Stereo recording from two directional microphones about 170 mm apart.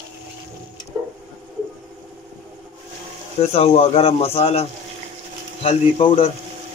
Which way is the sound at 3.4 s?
35° left (ahead or behind).